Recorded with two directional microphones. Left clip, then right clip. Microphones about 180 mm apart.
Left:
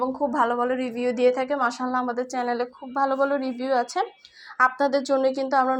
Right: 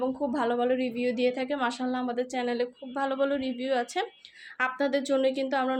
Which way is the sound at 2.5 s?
5° right (ahead or behind).